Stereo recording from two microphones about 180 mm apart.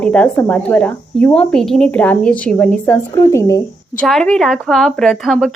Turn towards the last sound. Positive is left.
turn(degrees=5)  # may be behind; listen again after turning